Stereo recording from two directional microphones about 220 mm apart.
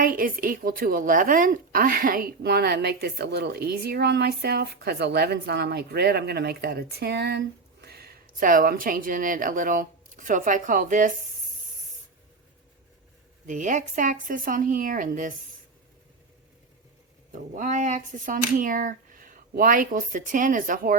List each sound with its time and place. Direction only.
0.0 s a woman's voice: 40° right (ahead or behind)
13.5 s speech: 35° right (ahead or behind)
17.3 s speech: 35° right (ahead or behind)